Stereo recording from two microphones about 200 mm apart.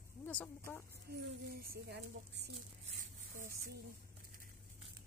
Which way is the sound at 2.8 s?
40° right (ahead or behind).